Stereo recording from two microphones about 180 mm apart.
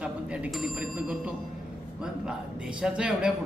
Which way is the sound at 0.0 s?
5° right (ahead or behind).